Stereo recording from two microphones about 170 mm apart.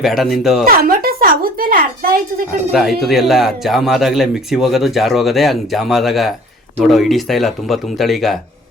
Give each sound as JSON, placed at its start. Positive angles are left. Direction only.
{"t": 0.0, "sound": "speech", "side_deg": 0}
{"t": 0.6, "sound": "speech", "side_deg": -60}
{"t": 2.7, "sound": "speech", "side_deg": 0}